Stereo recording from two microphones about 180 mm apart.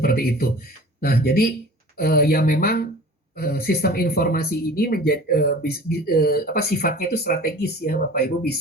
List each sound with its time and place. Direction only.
0.0 s speech: 60° left (ahead or behind)